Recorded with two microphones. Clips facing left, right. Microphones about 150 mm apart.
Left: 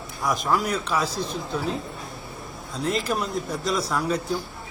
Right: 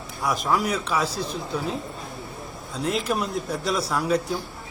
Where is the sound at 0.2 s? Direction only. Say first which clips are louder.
Even; 5° right (ahead or behind).